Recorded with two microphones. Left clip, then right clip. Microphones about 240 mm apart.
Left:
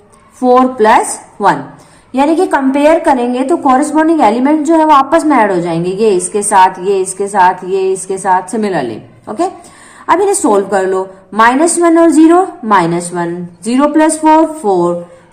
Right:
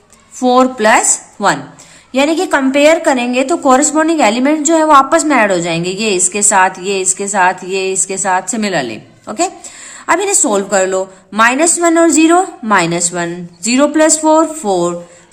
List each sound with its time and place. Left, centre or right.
0.4 s a woman's voice: right